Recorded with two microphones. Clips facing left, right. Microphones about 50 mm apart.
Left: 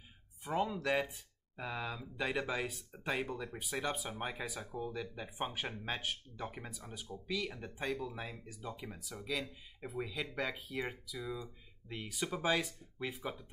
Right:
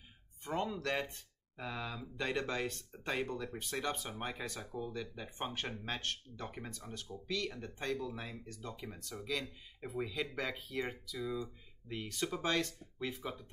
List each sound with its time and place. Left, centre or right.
0.4 s speech: centre